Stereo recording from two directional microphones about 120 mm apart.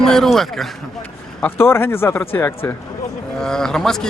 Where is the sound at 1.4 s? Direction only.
20° left (ahead or behind).